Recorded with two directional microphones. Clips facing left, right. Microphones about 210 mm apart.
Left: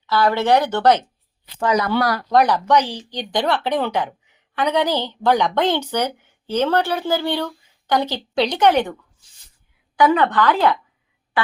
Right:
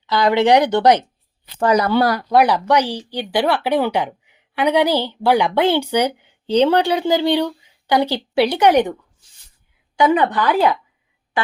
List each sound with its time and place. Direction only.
0.1 s a woman's voice: 15° right (ahead or behind)
1.5 s speech: 35° right (ahead or behind)
2.3 s a woman's voice: 10° right (ahead or behind)
10.1 s a woman's voice: 15° right (ahead or behind)